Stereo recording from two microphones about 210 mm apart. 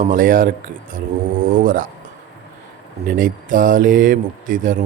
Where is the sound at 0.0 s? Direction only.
40° right (ahead or behind).